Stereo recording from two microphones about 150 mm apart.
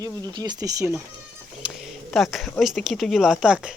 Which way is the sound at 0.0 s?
30° right (ahead or behind).